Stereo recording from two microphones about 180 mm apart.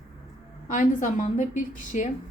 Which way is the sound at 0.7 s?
45° left (ahead or behind).